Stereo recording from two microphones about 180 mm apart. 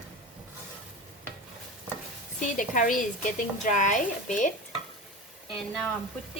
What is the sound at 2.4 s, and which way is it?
A woman's voice, 45° left (ahead or behind).